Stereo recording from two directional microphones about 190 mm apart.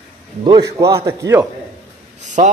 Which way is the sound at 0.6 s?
15° right (ahead or behind).